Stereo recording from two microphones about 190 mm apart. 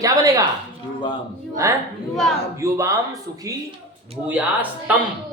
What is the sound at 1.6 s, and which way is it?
Speech, 15° right (ahead or behind).